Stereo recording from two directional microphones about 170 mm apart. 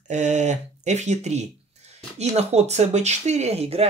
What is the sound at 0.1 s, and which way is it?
Speech, 45° right (ahead or behind).